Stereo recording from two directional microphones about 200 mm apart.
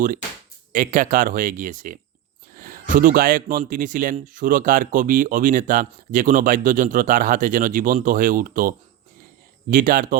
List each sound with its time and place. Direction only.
0.7 s speech: 40° right (ahead or behind)
2.6 s a sound: 45° right (ahead or behind)
2.9 s a man's voice: 40° right (ahead or behind)